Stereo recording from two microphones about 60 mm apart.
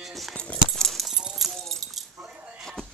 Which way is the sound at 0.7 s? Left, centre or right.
Centre.